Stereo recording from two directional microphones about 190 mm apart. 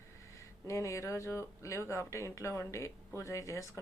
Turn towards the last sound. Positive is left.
turn(degrees=15)  # may be behind; listen again after turning